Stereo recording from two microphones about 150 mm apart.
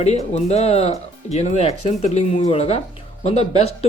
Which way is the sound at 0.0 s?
45° left (ahead or behind).